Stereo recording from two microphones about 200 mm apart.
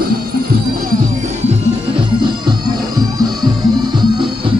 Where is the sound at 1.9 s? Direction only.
25° right (ahead or behind).